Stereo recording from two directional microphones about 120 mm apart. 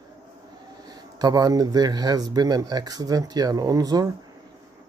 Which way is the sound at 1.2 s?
30° right (ahead or behind).